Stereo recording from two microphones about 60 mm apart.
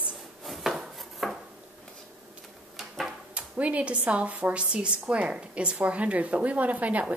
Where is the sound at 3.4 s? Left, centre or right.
Right.